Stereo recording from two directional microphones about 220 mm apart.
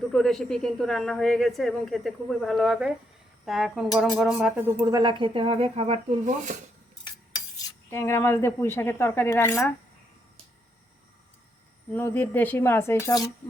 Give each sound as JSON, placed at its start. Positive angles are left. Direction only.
{"t": 0.1, "sound": "speech", "side_deg": 0}
{"t": 7.9, "sound": "speech", "side_deg": 10}
{"t": 11.9, "sound": "speech", "side_deg": 10}